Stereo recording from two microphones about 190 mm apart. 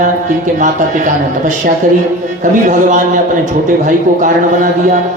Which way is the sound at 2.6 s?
40° right (ahead or behind).